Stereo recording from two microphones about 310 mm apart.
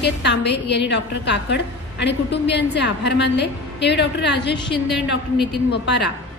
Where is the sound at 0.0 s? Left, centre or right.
Left.